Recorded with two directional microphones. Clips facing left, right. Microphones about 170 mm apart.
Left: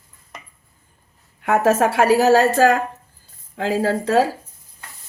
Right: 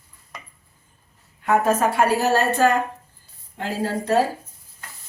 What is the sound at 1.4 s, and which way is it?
A woman's voice, 75° left (ahead or behind).